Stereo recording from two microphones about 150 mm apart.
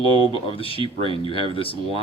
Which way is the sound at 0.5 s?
35° left (ahead or behind).